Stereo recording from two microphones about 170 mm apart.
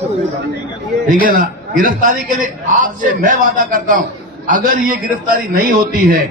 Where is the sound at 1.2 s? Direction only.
55° right (ahead or behind).